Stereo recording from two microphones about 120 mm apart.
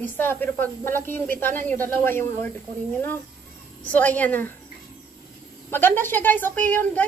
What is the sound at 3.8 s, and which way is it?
Speech, 10° left (ahead or behind).